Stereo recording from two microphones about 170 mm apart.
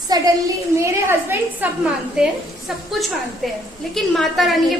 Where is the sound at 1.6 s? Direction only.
10° right (ahead or behind).